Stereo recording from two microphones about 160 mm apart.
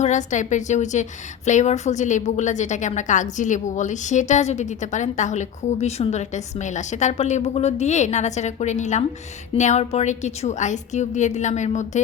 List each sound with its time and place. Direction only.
0.0 s a woman's voice: 50° left (ahead or behind)